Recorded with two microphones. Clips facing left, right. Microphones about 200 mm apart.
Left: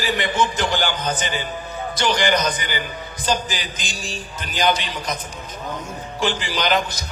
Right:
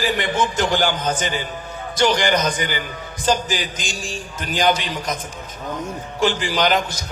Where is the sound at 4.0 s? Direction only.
50° right (ahead or behind).